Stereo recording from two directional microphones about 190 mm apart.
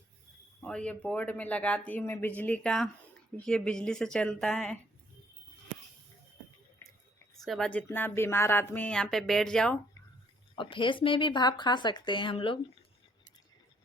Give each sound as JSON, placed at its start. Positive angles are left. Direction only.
{"t": 0.6, "sound": "speech", "side_deg": 5}
{"t": 7.4, "sound": "speech", "side_deg": 0}
{"t": 10.5, "sound": "a woman's voice", "side_deg": 25}